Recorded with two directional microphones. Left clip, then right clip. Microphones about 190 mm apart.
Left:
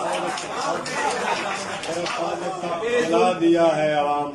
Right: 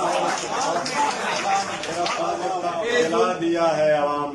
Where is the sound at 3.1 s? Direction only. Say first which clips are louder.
Left 3 dB; 5° left (ahead or behind).